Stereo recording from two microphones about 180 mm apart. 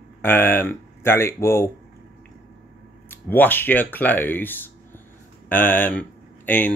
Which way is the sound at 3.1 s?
10° left (ahead or behind).